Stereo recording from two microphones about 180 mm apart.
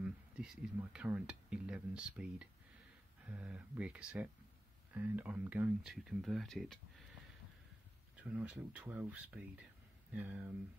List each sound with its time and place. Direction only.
0.0 s speech: 5° right (ahead or behind)
8.2 s speech: 10° right (ahead or behind)